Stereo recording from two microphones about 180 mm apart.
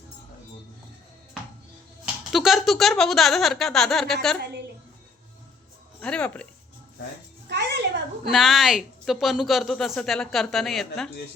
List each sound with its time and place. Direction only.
2.3 s a woman's voice: centre (ahead or behind)
6.0 s speech: 5° left (ahead or behind)
7.5 s a sound: 70° right (ahead or behind)
8.3 s a woman's voice: centre (ahead or behind)